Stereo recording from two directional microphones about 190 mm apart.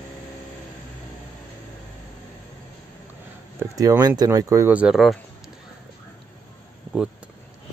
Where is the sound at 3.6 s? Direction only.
20° right (ahead or behind); by 5.1 s centre (ahead or behind).